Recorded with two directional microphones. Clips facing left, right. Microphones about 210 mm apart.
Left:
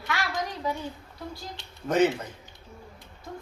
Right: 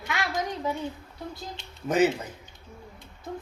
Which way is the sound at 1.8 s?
10° right (ahead or behind).